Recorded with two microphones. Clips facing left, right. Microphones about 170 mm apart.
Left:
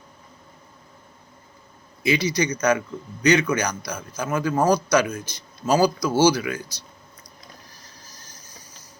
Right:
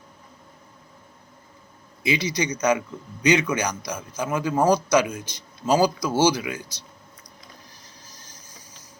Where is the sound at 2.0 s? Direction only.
20° right (ahead or behind).